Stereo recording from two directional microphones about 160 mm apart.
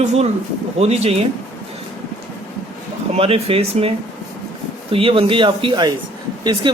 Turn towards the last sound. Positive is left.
turn(degrees=-30)  # may be behind; listen again after turning